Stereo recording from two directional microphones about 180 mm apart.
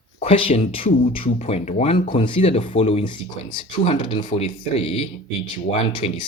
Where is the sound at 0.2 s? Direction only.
30° left (ahead or behind).